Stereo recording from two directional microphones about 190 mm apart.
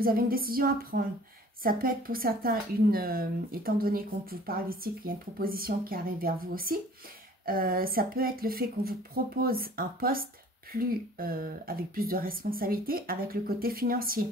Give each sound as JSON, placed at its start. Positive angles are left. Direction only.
{"t": 0.0, "sound": "speech", "side_deg": -50}